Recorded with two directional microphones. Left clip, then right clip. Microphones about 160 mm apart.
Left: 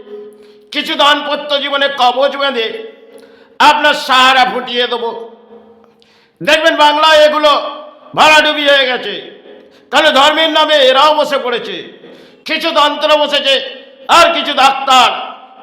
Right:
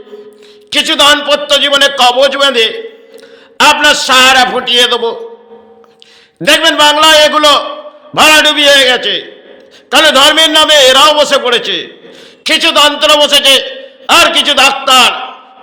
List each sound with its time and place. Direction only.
0.7 s a man's voice: 10° right (ahead or behind)
6.4 s a man's voice: 15° right (ahead or behind)